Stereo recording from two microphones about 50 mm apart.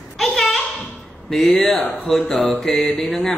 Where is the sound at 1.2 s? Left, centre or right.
Centre.